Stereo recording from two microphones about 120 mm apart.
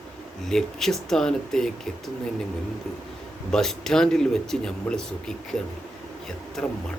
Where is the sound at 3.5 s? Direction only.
5° left (ahead or behind).